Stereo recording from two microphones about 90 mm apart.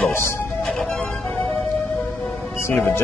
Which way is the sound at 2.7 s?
25° left (ahead or behind).